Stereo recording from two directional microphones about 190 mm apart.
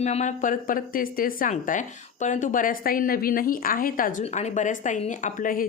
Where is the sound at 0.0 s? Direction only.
35° left (ahead or behind).